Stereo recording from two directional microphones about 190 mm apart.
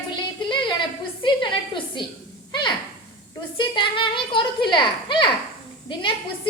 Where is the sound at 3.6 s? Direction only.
25° left (ahead or behind).